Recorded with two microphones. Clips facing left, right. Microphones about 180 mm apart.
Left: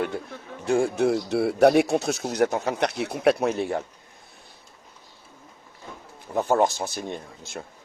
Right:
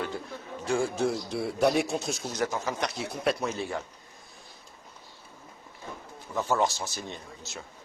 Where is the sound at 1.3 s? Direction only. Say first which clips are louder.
Left 9 dB; 65° left (ahead or behind).